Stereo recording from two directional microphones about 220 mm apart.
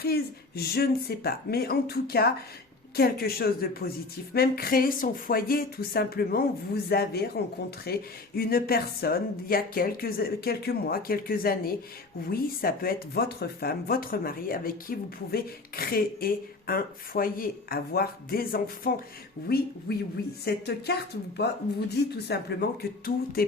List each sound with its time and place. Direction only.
0.0 s speech: 45° left (ahead or behind)
21.9 s speech: 50° left (ahead or behind)